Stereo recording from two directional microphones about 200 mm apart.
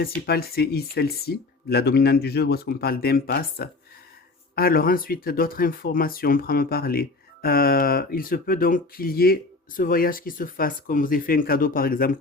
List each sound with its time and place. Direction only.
0.0 s speech: 50° left (ahead or behind)